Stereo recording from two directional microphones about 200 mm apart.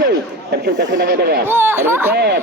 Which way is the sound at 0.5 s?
60° right (ahead or behind).